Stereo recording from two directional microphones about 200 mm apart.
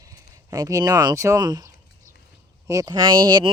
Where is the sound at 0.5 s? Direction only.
15° right (ahead or behind).